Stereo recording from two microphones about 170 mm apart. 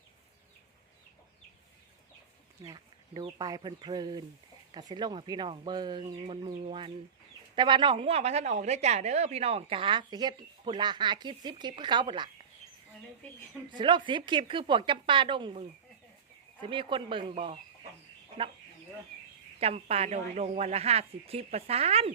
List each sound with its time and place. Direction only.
2.6 s a woman's voice: 25° right (ahead or behind)
13.7 s a woman's voice: 30° right (ahead or behind)
19.5 s speech: 35° right (ahead or behind)